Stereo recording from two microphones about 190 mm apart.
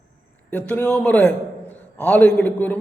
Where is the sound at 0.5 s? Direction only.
10° left (ahead or behind).